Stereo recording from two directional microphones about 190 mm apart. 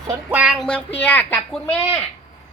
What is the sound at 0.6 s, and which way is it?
A woman's voice, 5° left (ahead or behind).